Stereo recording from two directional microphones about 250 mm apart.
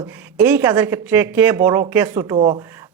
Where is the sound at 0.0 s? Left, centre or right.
Centre.